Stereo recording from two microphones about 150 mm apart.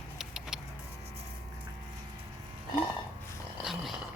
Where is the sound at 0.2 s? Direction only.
5° right (ahead or behind).